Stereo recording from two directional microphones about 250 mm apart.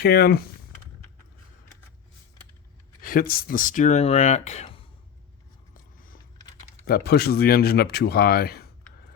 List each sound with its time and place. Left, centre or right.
0.0 s speech: left
3.0 s speech: left
6.8 s speech: left